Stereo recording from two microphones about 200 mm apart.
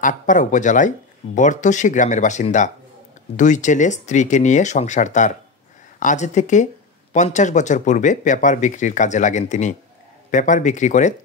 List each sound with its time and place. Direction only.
0.0 s speech: 40° left (ahead or behind)